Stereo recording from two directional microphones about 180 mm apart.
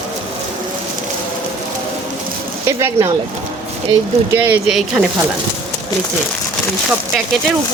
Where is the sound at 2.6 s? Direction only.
15° right (ahead or behind).